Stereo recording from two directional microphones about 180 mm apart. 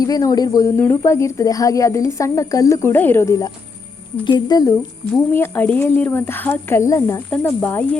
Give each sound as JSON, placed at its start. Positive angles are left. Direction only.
{"t": 0.0, "sound": "speech", "side_deg": 20}
{"t": 5.3, "sound": "speech", "side_deg": 10}